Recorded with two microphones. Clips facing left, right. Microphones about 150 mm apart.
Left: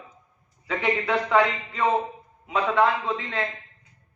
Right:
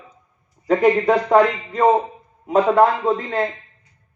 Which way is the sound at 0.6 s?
45° right (ahead or behind).